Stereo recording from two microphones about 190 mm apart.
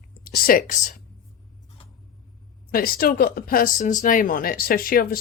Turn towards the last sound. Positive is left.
turn(degrees=50)  # may be behind; listen again after turning